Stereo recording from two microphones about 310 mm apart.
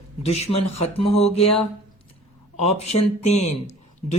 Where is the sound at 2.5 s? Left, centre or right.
Centre.